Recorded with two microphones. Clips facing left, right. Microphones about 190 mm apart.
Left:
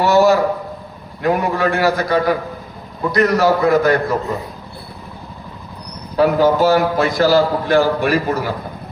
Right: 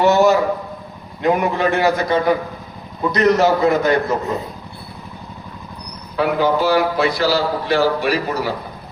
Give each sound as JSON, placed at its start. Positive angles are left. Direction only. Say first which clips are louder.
{"t": 0.0, "sound": "a sound", "louder": "left 1 dB", "side_deg": -20}
{"t": 1.2, "sound": "a man's voice", "louder": "even", "side_deg": -20}
{"t": 6.1, "sound": "a man's voice", "louder": "left 4 dB", "side_deg": 45}